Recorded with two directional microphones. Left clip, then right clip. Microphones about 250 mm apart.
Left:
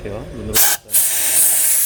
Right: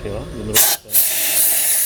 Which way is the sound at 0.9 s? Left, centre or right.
Centre.